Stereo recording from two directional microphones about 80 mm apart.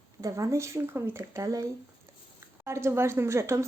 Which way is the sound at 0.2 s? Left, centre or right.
Right.